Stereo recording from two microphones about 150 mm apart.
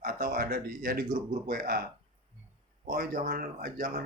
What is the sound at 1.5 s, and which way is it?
Speech, 90° right.